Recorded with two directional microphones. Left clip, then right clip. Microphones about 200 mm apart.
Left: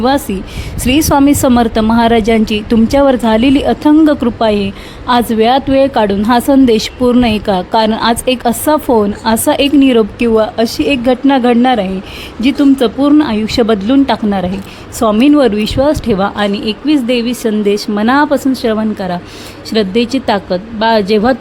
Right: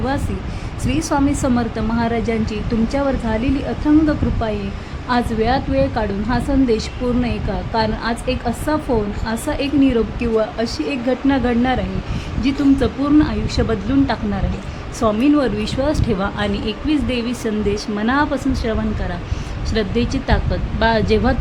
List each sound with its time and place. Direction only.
0.9 s a woman's voice: 45° left (ahead or behind)